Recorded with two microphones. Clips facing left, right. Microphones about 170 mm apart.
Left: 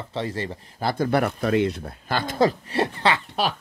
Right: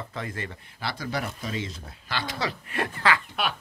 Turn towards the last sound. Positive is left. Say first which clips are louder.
# left 3 dB
turn(degrees=30)  # may be behind; listen again after turning